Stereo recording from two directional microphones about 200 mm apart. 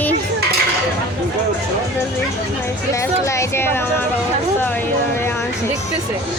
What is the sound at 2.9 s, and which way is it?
Speech, 15° left (ahead or behind).